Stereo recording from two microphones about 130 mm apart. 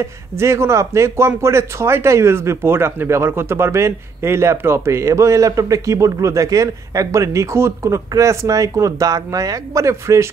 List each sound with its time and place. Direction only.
0.0 s a man's voice: 20° right (ahead or behind)